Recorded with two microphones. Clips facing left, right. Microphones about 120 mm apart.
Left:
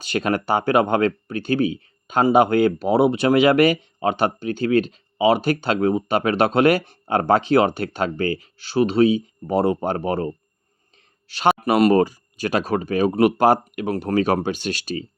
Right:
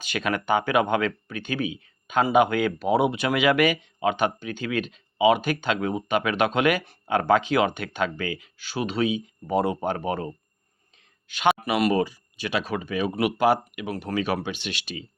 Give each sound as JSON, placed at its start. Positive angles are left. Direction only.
{"t": 0.0, "sound": "speech", "side_deg": 35}